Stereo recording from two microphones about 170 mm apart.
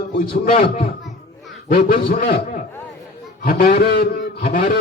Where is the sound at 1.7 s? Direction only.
55° left (ahead or behind).